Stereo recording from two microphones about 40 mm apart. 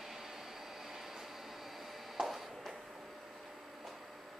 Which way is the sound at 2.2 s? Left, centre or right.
Centre.